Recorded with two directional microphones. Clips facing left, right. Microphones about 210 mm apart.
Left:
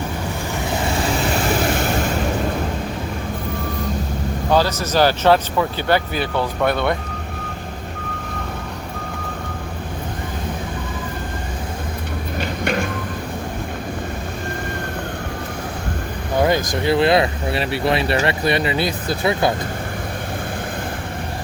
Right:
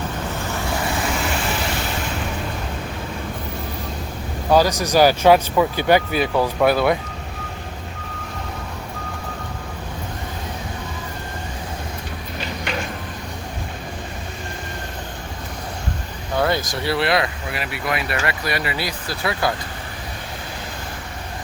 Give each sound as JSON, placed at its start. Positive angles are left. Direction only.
{"t": 4.5, "sound": "speech", "side_deg": -15}
{"t": 16.4, "sound": "speech", "side_deg": 15}